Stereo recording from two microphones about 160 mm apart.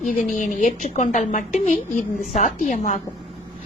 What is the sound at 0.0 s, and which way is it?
A woman's voice, 50° left (ahead or behind).